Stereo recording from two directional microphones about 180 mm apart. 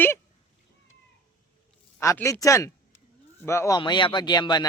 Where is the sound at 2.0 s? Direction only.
15° left (ahead or behind).